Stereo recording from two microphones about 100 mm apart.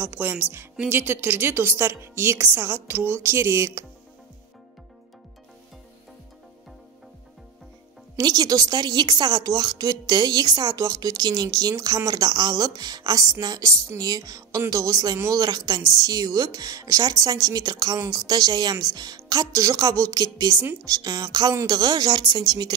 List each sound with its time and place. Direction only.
0.0 s a woman's voice: 20° right (ahead or behind)
8.2 s a woman's voice: 40° right (ahead or behind)